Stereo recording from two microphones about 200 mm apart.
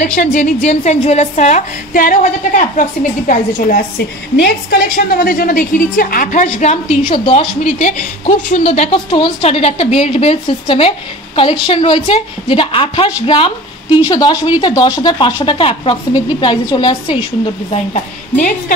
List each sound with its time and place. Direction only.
0.0 s a woman's voice: 40° left (ahead or behind); by 17.2 s 25° left (ahead or behind)